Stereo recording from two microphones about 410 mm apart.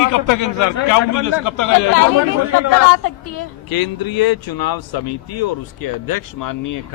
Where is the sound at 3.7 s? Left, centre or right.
Left.